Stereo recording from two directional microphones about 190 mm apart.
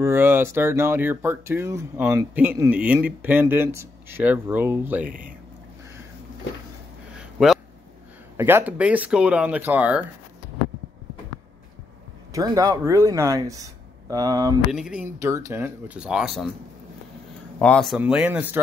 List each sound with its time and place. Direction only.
0.0 s speech: 10° right (ahead or behind)
5.0 s speech: 45° right (ahead or behind)
7.2 s a sound: centre (ahead or behind)
8.4 s speech: 10° right (ahead or behind)
12.3 s speech: 15° right (ahead or behind)
14.7 s speech: 5° right (ahead or behind)
15.1 s speech: 15° right (ahead or behind)
17.6 s speech: 5° left (ahead or behind)
17.9 s speech: 5° right (ahead or behind)